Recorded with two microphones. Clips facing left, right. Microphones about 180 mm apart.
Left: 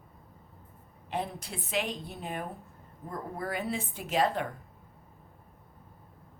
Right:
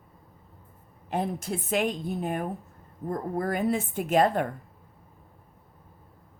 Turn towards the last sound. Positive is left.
turn(degrees=-50)  # may be behind; listen again after turning